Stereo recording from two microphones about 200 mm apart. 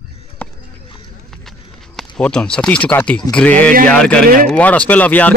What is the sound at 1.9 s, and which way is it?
A man's voice, 5° left (ahead or behind).